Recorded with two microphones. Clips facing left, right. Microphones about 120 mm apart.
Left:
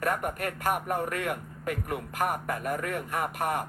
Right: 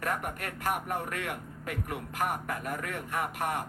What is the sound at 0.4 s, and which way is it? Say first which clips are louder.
A man's voice: left 3 dB; 55° left (ahead or behind).